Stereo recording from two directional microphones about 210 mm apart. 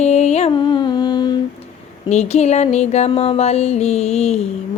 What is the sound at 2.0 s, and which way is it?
Music, 30° left (ahead or behind).